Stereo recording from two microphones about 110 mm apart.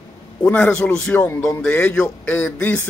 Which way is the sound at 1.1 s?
25° left (ahead or behind).